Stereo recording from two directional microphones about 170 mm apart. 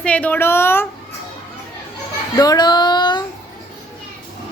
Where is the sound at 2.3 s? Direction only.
20° left (ahead or behind).